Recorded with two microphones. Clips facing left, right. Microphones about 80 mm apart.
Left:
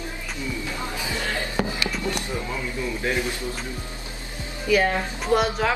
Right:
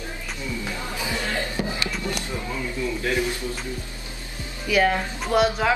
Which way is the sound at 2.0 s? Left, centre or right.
Left.